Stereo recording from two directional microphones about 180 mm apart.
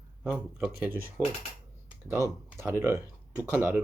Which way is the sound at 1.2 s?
15° left (ahead or behind).